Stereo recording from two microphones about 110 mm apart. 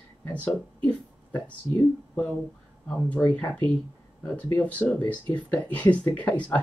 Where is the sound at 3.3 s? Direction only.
10° left (ahead or behind).